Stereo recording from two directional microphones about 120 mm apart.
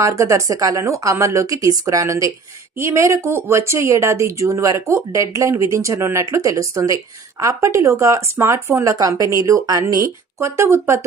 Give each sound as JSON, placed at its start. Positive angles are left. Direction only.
{"t": 0.0, "sound": "speech", "side_deg": -25}